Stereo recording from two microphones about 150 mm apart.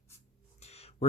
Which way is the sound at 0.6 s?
45° left (ahead or behind).